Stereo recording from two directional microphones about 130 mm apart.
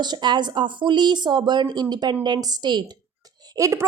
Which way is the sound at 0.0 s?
35° right (ahead or behind).